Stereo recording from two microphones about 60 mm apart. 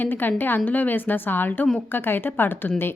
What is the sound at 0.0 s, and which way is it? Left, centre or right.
A woman's voice, left.